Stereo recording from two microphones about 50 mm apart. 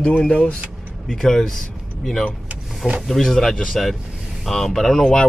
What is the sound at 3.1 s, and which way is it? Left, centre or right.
Speech, centre.